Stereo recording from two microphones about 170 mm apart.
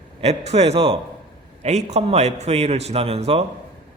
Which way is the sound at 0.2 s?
40° right (ahead or behind).